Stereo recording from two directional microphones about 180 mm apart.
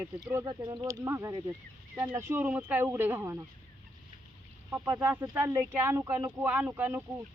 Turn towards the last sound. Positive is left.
turn(degrees=-10)  # may be behind; listen again after turning